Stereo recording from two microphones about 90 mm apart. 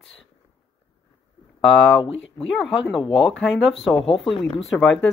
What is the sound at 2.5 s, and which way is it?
Speech, 5° right (ahead or behind).